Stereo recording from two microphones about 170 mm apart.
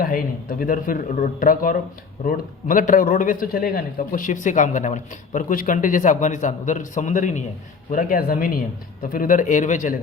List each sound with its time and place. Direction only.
0.0 s a man's voice: 55° left (ahead or behind)